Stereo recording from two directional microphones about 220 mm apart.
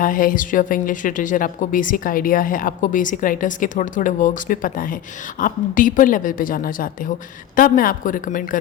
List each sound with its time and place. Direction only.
0.0 s a woman's voice: 40° left (ahead or behind)